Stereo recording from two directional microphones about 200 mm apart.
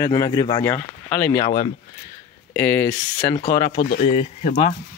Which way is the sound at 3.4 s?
50° left (ahead or behind).